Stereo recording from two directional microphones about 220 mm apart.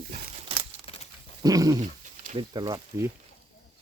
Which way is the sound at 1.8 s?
30° right (ahead or behind).